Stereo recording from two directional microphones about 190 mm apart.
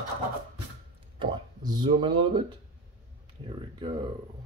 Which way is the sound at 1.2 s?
25° right (ahead or behind).